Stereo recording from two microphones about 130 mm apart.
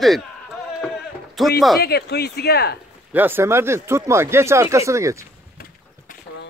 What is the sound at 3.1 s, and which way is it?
Speech, 15° right (ahead or behind).